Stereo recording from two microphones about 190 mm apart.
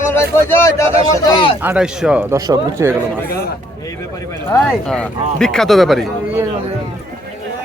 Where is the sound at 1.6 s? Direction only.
5° right (ahead or behind).